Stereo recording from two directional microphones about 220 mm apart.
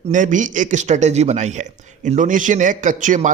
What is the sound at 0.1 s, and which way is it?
A man's voice, 35° right (ahead or behind).